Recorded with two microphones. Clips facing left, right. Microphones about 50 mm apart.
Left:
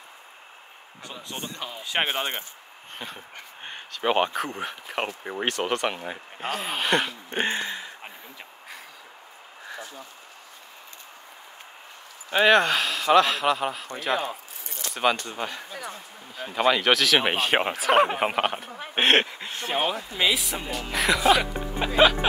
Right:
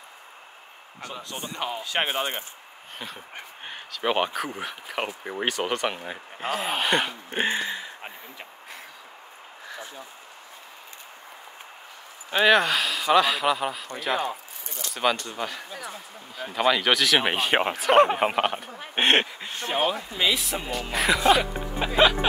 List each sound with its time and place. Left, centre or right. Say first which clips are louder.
1.6 s speech: right 6 dB; right
1.9 s speech: left 2 dB; left
3.6 s speech: left 1 dB; centre
7.2 s a sound: right 1 dB; centre
12.3 s speech: left 1 dB; centre
15.3 s speech: even; centre